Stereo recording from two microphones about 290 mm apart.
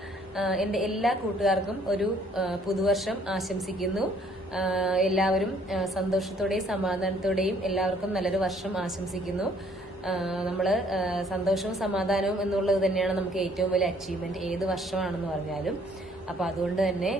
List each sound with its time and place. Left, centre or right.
0.3 s speech: centre
16.4 s speech: centre